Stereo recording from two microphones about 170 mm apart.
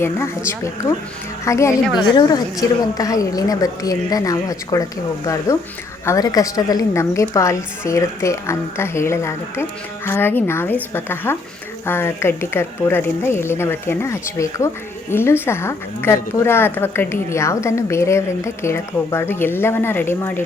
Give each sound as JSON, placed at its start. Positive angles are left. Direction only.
{"t": 0.0, "sound": "a woman's voice", "side_deg": 15}